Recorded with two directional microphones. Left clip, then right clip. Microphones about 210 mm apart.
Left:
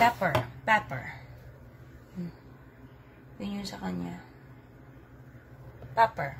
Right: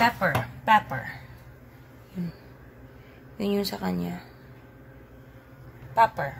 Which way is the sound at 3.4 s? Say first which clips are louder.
Right 11 dB; 45° right (ahead or behind).